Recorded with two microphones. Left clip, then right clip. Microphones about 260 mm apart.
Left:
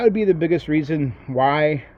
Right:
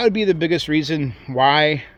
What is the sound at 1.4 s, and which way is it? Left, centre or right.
Speech, right.